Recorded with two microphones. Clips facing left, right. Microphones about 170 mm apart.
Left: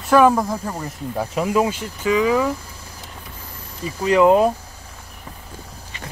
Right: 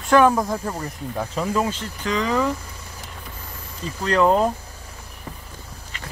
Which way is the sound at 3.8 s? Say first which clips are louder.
Left 4 dB; 10° left (ahead or behind).